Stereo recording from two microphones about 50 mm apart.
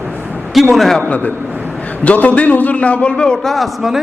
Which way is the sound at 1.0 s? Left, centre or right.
Left.